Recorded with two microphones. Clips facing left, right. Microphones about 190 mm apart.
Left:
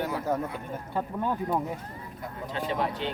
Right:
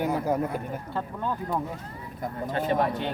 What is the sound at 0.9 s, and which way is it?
Speech, 15° left (ahead or behind).